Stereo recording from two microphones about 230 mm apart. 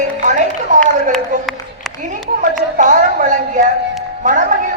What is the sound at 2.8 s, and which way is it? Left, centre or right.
A woman's voice, right.